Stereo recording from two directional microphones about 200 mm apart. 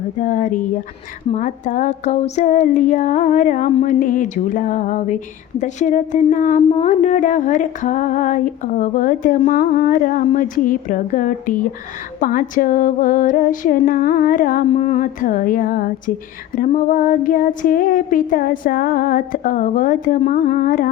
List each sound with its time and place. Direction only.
0.2 s speech: 40° left (ahead or behind)
12.2 s female singing: 45° left (ahead or behind)
14.7 s speech: 35° left (ahead or behind)
16.6 s female singing: 40° left (ahead or behind)